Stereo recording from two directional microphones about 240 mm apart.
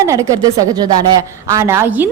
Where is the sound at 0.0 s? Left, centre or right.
Centre.